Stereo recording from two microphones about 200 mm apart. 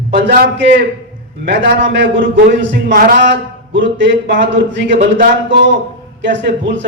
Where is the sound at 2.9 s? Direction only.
45° right (ahead or behind).